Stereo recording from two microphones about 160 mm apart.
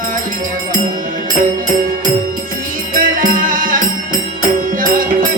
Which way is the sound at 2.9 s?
60° right (ahead or behind).